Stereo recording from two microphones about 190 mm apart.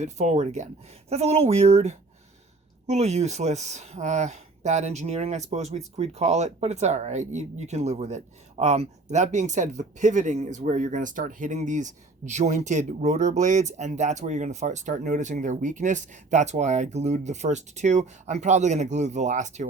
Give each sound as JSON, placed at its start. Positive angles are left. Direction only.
{"t": 0.0, "sound": "speech", "side_deg": -40}